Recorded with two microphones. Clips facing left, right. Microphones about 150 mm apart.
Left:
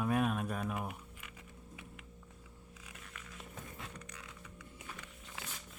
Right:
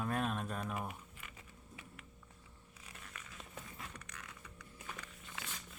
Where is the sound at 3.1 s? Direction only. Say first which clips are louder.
Left 1 dB; centre (ahead or behind).